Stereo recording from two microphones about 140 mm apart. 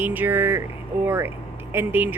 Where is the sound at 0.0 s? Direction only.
15° right (ahead or behind).